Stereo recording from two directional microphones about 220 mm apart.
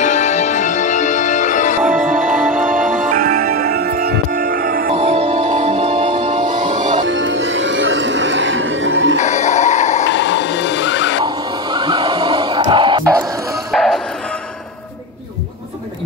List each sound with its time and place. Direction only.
0.0 s music: 30° left (ahead or behind)
2.0 s music: 35° right (ahead or behind)
7.1 s music: 60° right (ahead or behind)
9.2 s music: 30° left (ahead or behind)
10.1 s music: 55° left (ahead or behind)
11.2 s a sound: 20° right (ahead or behind)
13.7 s music: centre (ahead or behind)